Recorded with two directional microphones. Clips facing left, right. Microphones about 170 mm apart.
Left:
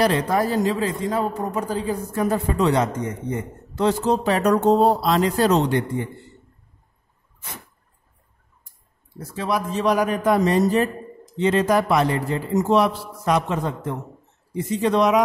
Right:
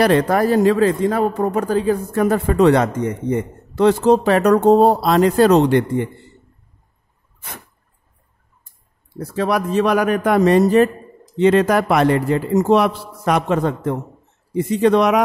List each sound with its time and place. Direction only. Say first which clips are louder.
0.0 s a man's voice: right 5 dB; 60° right (ahead or behind)
9.2 s a man's voice: right 5 dB; 65° right (ahead or behind)